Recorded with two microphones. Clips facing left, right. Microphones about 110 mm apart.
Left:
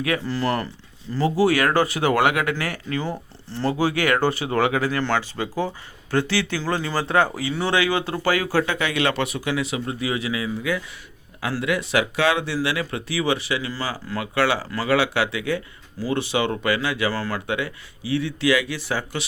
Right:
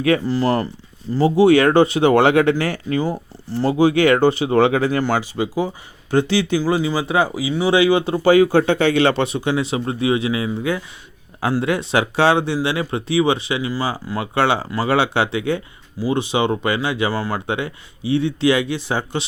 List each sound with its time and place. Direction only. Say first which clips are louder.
0.2 s speech: right 5 dB; 20° right (ahead or behind)
3.0 s speech: right 6 dB; 15° right (ahead or behind)
5.0 s speech: right 4 dB; 15° right (ahead or behind)
7.7 s speech: right 8 dB; 15° right (ahead or behind)